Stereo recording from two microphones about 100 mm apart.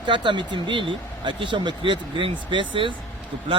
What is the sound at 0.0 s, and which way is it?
Speech, 55° right (ahead or behind).